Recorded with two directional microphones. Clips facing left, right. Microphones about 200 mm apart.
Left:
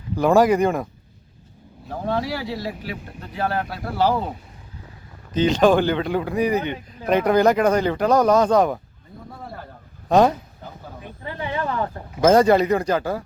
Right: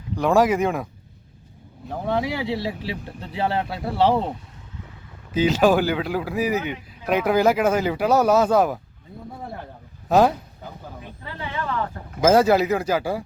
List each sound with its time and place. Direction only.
0.2 s speech: centre (ahead or behind)
2.0 s speech: 15° right (ahead or behind)
5.3 s speech: 5° right (ahead or behind)
10.1 s speech: 5° right (ahead or behind)
11.3 s a sound: 15° left (ahead or behind)
12.2 s speech: 5° right (ahead or behind)